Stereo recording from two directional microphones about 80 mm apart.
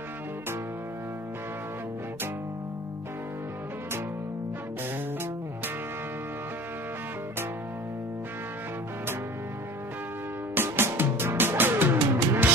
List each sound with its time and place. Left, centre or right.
10.5 s music: right